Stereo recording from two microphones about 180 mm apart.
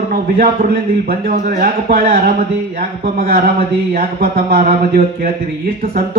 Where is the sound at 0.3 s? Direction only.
55° right (ahead or behind).